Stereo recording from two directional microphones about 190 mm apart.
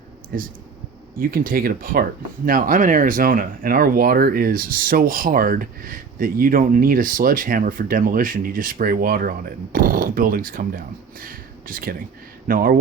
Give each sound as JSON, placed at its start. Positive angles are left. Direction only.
{"t": 0.3, "sound": "speech", "side_deg": -50}